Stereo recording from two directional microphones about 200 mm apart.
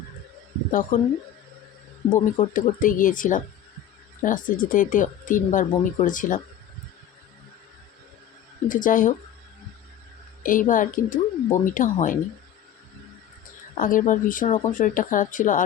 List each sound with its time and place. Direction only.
0.7 s speech: 40° left (ahead or behind)
2.0 s speech: 25° left (ahead or behind)
2.4 s speech: 40° left (ahead or behind)
8.6 s speech: 40° left (ahead or behind)
10.4 s speech: 40° left (ahead or behind)
13.7 s speech: 40° left (ahead or behind)